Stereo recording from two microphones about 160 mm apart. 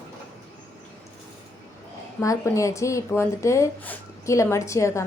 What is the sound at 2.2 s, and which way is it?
A woman's voice, 20° left (ahead or behind).